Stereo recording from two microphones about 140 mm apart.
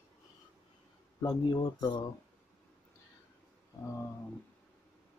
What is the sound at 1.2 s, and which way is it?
Speech, 30° left (ahead or behind).